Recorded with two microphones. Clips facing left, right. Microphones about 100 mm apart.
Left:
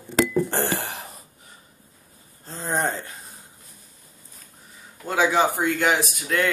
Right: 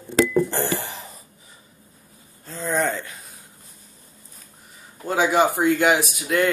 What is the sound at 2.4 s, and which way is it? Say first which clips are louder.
Speech: right 2 dB; 35° left (ahead or behind).